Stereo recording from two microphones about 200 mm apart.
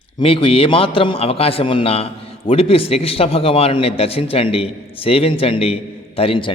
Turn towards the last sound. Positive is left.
turn(degrees=25)  # may be behind; listen again after turning